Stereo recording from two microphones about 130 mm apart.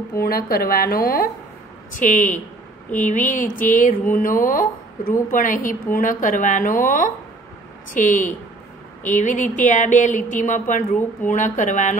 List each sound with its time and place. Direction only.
0.3 s speech: 90° left
2.0 s speech: 80° left
7.9 s speech: 75° left (ahead or behind)